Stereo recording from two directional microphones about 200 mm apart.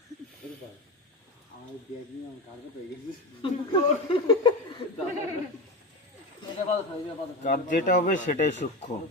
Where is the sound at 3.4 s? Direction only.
25° left (ahead or behind).